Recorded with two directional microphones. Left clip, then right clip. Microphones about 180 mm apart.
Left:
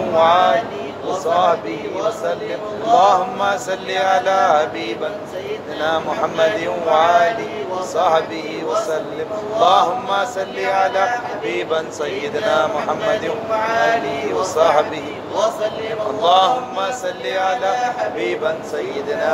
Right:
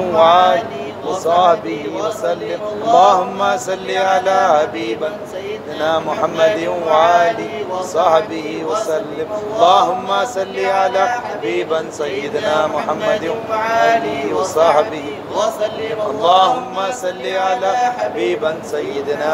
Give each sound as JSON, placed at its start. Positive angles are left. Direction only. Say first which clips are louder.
{"t": 0.1, "sound": "mantra", "louder": "right 3 dB", "side_deg": -15}
{"t": 2.9, "sound": "mantra", "louder": "right 2 dB", "side_deg": -15}
{"t": 5.8, "sound": "mantra", "louder": "right 3 dB", "side_deg": -10}
{"t": 9.6, "sound": "mantra", "louder": "right 2 dB", "side_deg": -10}
{"t": 14.2, "sound": "mantra", "louder": "right 1 dB", "side_deg": -5}
{"t": 15.3, "sound": "a man's voice", "louder": "right 1 dB", "side_deg": -55}
{"t": 16.2, "sound": "mantra", "louder": "right 2 dB", "side_deg": -10}